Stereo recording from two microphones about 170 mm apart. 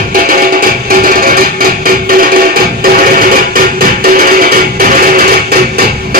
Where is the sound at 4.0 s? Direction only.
55° right (ahead or behind).